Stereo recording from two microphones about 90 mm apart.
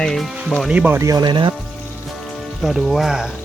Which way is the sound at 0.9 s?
35° right (ahead or behind).